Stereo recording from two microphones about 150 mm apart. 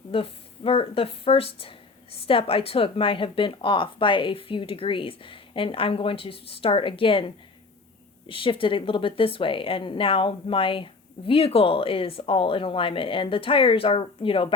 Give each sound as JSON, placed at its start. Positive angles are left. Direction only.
{"t": 0.1, "sound": "speech", "side_deg": 40}